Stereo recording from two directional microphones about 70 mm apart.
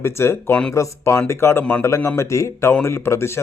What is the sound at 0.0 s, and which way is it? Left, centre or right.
Speech, left.